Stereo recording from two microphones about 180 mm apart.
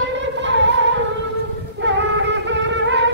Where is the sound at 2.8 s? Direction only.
90° right.